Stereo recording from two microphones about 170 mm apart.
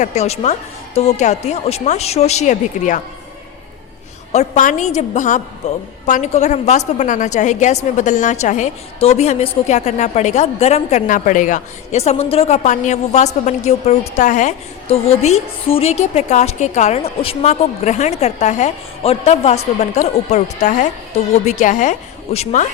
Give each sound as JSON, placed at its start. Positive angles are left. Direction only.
{"t": 0.0, "sound": "a woman's voice", "side_deg": 40}
{"t": 4.3, "sound": "a woman's voice", "side_deg": 45}